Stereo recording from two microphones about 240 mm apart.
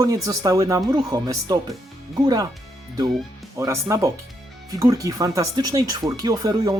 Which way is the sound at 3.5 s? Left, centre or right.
Centre.